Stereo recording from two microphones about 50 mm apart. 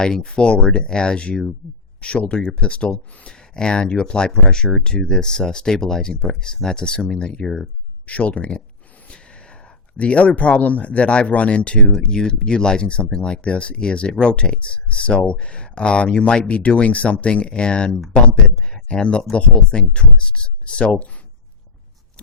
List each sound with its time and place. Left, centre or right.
0.0 s speech: centre